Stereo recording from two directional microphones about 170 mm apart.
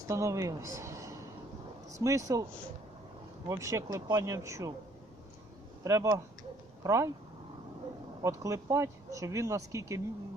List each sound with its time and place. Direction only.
0.1 s a man's voice: 20° right (ahead or behind)
5.8 s speech: 20° right (ahead or behind)
8.2 s speech: 20° right (ahead or behind)